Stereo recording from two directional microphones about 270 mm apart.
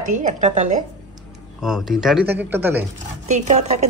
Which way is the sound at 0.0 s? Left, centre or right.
Right.